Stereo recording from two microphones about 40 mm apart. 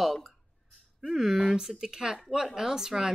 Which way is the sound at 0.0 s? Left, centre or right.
Centre.